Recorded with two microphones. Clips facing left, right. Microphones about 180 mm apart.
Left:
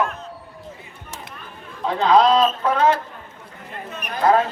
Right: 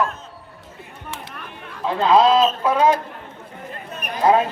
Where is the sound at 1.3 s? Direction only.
65° right (ahead or behind).